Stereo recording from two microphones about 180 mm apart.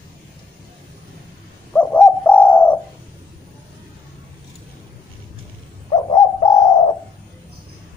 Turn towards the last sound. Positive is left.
turn(degrees=25)  # may be behind; listen again after turning